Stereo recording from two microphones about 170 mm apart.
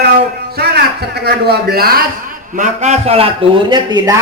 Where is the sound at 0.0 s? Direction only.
70° right (ahead or behind).